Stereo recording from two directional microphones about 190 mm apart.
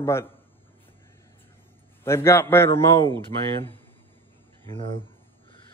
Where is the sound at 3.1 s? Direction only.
25° right (ahead or behind).